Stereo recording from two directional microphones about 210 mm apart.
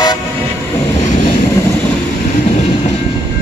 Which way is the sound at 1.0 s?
35° left (ahead or behind).